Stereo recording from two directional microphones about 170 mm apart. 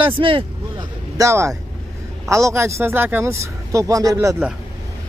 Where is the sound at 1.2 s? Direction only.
15° right (ahead or behind).